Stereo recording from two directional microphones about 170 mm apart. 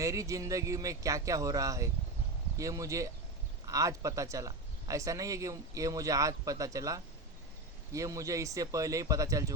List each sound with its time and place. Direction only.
0.0 s speech: 20° right (ahead or behind)